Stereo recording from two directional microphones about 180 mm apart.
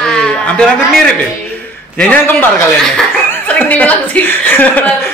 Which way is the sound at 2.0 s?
10° left (ahead or behind).